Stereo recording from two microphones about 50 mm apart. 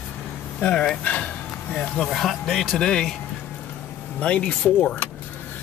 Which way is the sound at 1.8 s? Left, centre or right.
Centre.